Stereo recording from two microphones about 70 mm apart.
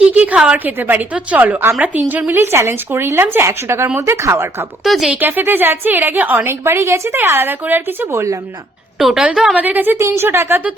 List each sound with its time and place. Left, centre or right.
0.0 s a woman's voice: centre
2.4 s speech: right
4.8 s speech: centre
5.2 s a woman's voice: right
8.1 s speech: right
9.0 s a woman's voice: centre
9.6 s a woman's voice: right
10.0 s speech: right